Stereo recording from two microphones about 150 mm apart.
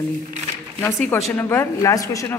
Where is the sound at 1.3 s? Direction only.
15° left (ahead or behind).